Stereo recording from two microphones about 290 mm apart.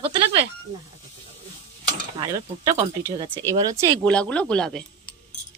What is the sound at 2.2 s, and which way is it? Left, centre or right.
Speech, centre.